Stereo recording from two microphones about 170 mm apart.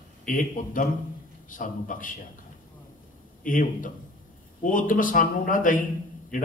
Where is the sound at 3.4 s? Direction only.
50° left (ahead or behind).